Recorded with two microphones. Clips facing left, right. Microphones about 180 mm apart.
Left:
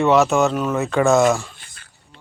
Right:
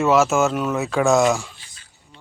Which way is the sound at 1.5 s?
55° left (ahead or behind).